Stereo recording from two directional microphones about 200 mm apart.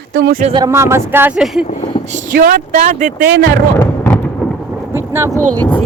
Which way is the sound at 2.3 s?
45° right (ahead or behind).